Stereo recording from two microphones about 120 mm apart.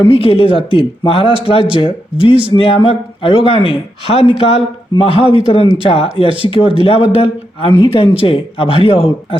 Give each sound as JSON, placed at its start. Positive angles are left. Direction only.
{"t": 0.0, "sound": "speech", "side_deg": 50}